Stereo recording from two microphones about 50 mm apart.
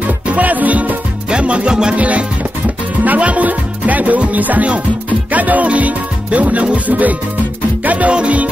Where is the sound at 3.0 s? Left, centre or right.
Right.